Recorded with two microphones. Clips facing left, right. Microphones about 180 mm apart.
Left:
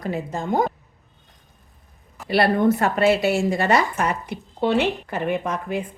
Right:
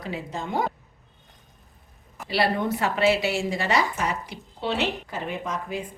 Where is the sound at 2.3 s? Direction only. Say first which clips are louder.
Left 6 dB; 55° left (ahead or behind).